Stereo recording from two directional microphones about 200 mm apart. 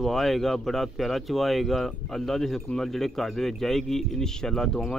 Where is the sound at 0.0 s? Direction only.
Centre (ahead or behind).